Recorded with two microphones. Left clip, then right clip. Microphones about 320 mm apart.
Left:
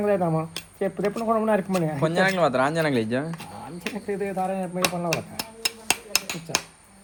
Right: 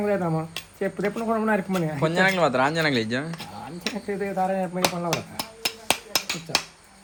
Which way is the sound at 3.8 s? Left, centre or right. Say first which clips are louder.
Even; centre.